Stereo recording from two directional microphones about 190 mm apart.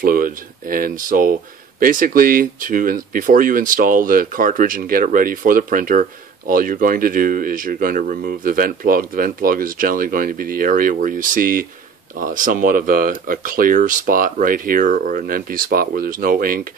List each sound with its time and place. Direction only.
0.0 s speech: 45° right (ahead or behind)